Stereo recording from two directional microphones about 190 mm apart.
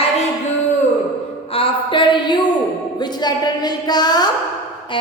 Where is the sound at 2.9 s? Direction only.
20° left (ahead or behind).